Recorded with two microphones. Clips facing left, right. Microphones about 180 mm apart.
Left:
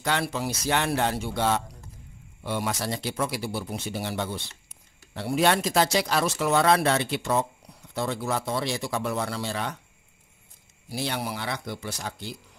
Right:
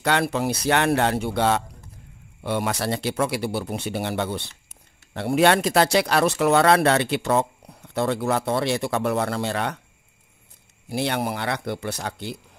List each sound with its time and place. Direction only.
0.0 s speech: 65° right (ahead or behind)
10.9 s speech: 55° right (ahead or behind)